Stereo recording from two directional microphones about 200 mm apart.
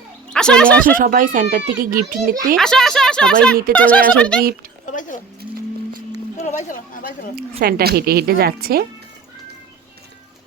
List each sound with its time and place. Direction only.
0.3 s speech: 5° left (ahead or behind)
0.9 s speech: 45° right (ahead or behind)
2.6 s speech: centre (ahead or behind)
4.9 s speech: 40° left (ahead or behind)
6.3 s speech: 35° left (ahead or behind)
7.6 s speech: 50° right (ahead or behind)